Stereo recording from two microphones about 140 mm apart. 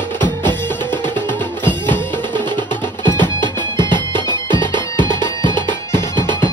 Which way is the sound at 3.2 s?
35° right (ahead or behind).